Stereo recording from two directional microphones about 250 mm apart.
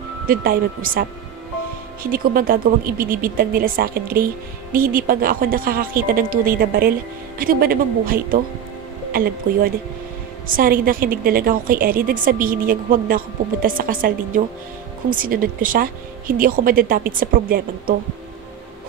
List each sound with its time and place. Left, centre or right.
0.3 s a woman's voice: right
2.0 s a woman's voice: right